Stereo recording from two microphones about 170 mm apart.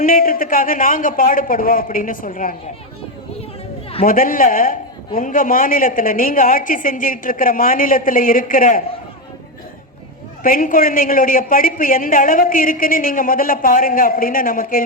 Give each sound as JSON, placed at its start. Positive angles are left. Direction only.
{"t": 0.0, "sound": "a man's voice", "side_deg": 60}
{"t": 4.0, "sound": "a man's voice", "side_deg": 55}
{"t": 10.4, "sound": "a man's voice", "side_deg": 55}